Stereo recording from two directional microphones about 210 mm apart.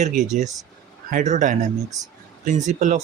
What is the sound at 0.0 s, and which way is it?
Speech, 35° right (ahead or behind).